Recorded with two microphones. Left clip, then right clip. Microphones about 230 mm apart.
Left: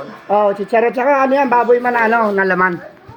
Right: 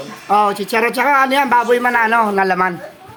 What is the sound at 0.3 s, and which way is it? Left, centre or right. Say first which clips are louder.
Speech: even; right.